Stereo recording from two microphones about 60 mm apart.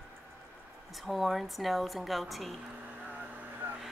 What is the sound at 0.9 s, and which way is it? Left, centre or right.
A woman's voice, centre.